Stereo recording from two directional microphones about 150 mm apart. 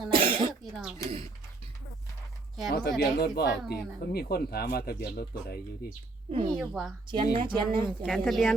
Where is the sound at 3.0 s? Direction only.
90° left.